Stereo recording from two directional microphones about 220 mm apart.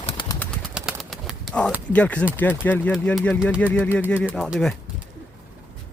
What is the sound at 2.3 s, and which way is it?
Speech, 10° left (ahead or behind).